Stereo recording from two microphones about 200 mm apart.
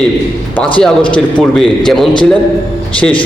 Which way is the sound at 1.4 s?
Centre (ahead or behind).